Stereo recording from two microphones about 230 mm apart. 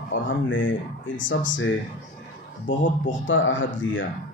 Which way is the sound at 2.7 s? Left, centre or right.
Left.